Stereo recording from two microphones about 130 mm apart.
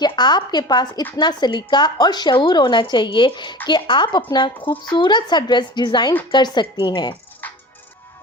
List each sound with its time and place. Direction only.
0.0 s a woman's voice: 35° left (ahead or behind)
7.4 s music: 10° left (ahead or behind)